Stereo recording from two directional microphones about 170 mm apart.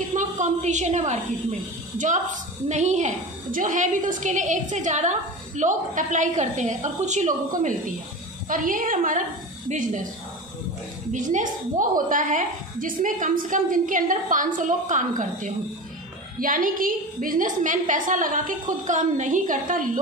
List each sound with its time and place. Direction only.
0.1 s a woman's voice: 45° right (ahead or behind)
11.1 s a woman's voice: 45° right (ahead or behind)